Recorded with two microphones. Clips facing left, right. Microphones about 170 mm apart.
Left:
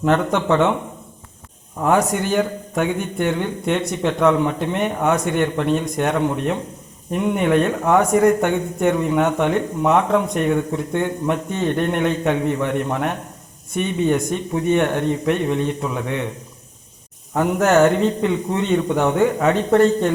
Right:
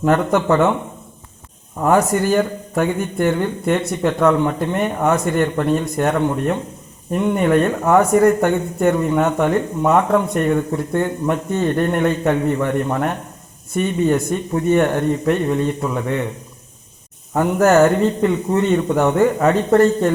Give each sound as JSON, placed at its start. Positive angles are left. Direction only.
{"t": 0.0, "sound": "a man's voice", "side_deg": -5}
{"t": 1.8, "sound": "a man's voice", "side_deg": 0}
{"t": 17.3, "sound": "a man's voice", "side_deg": -5}